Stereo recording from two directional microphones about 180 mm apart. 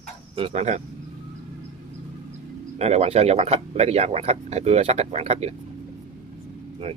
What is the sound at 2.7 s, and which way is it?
Speech, 35° right (ahead or behind).